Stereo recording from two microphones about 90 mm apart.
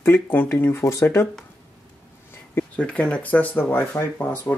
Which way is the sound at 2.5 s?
15° left (ahead or behind).